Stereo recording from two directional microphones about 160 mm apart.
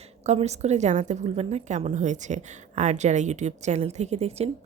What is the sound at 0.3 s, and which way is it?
A woman's voice, 45° right (ahead or behind).